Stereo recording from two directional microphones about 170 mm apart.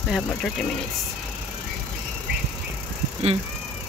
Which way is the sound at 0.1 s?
5° left (ahead or behind).